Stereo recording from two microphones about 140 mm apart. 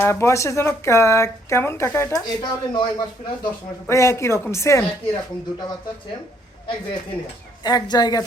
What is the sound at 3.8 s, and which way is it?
Speech, 20° left (ahead or behind).